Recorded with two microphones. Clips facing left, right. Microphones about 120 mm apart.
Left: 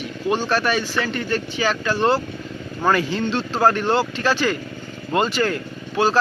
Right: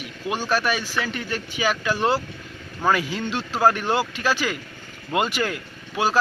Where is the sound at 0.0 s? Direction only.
10° right (ahead or behind).